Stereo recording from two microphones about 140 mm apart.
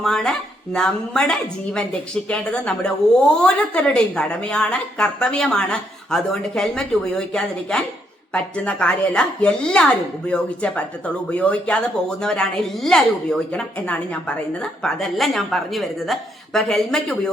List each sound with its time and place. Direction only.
0.0 s a woman's voice: 5° left (ahead or behind)